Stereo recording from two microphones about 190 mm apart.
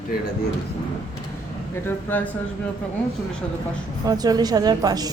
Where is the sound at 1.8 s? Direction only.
10° left (ahead or behind).